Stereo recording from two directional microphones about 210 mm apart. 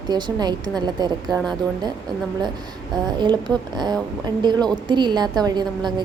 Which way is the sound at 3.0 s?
20° right (ahead or behind).